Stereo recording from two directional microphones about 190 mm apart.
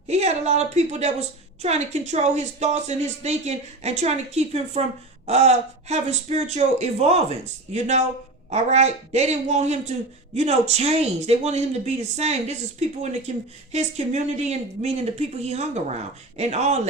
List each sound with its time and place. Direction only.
0.1 s a woman's voice: 35° right (ahead or behind)